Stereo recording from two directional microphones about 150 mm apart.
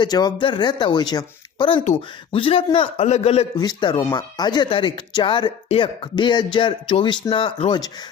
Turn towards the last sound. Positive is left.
turn(degrees=35)  # may be behind; listen again after turning